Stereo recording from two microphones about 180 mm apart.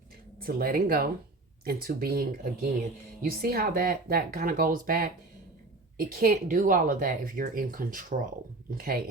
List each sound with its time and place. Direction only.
0.4 s speech: 55° right (ahead or behind)